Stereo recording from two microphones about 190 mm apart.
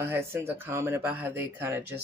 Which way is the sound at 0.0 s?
15° right (ahead or behind).